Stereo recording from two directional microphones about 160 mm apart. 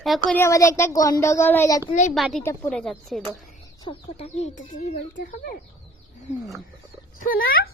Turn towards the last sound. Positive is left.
turn(degrees=70)  # may be behind; listen again after turning